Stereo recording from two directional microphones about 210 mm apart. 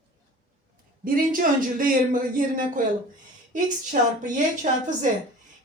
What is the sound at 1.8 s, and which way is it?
Speech, 40° right (ahead or behind).